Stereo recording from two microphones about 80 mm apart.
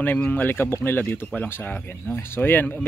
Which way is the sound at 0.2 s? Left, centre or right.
Left.